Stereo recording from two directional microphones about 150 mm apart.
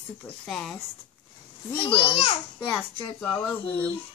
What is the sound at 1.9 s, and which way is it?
Speech, 35° left (ahead or behind).